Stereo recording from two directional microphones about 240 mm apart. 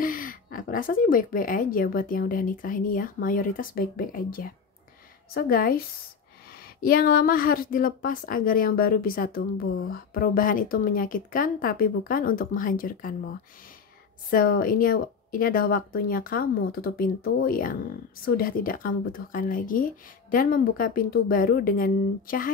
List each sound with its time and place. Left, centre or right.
0.0 s speech: left
14.3 s speech: left